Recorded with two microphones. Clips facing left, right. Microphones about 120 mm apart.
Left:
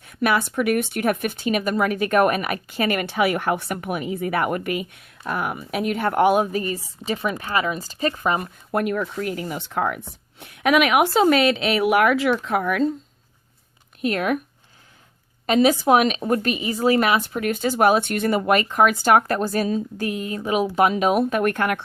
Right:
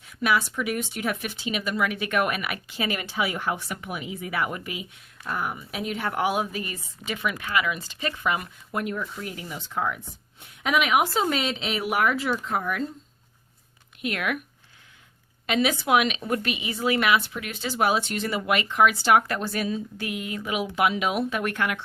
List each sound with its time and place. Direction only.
0.0 s speech: 55° left (ahead or behind); by 8.4 s 40° left (ahead or behind)
8.7 s speech: 65° left (ahead or behind); by 12.9 s 85° left
14.0 s speech: 40° left (ahead or behind)
15.4 s speech: 40° left (ahead or behind)